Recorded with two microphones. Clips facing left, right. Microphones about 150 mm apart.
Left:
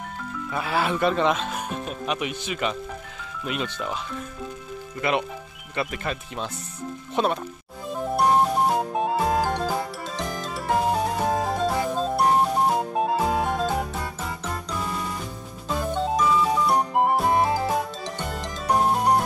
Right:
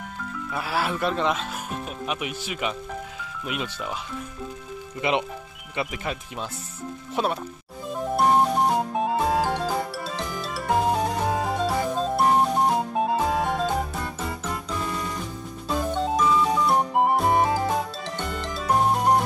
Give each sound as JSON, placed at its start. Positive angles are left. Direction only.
{"t": 0.5, "sound": "speech", "side_deg": -5}
{"t": 5.8, "sound": "speech", "side_deg": -10}
{"t": 7.9, "sound": "music", "side_deg": 0}
{"t": 10.0, "sound": "music", "side_deg": 20}
{"t": 10.8, "sound": "music", "side_deg": 0}
{"t": 15.7, "sound": "music", "side_deg": 0}
{"t": 18.8, "sound": "music", "side_deg": 0}